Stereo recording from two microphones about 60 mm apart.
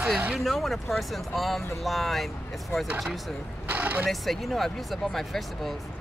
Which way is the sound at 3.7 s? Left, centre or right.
Right.